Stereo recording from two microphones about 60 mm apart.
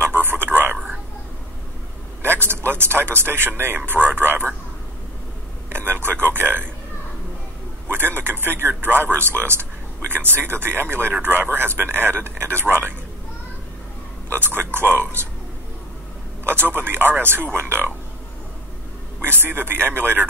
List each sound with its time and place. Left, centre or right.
0.0 s a sound: right
2.2 s a man's voice: right
5.7 s a sound: right
7.9 s a man's voice: right
14.3 s a man's voice: right
16.4 s a man's voice: right
19.2 s a man's voice: right